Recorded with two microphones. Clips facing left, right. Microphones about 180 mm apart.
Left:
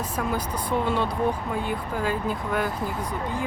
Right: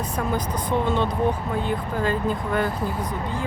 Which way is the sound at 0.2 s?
10° left (ahead or behind).